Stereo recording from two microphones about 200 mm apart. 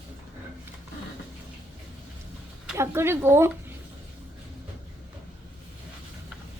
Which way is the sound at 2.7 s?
10° right (ahead or behind).